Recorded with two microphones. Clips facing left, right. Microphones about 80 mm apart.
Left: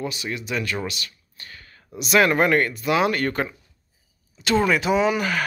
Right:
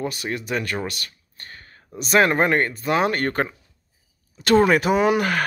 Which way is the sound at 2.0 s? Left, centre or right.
Right.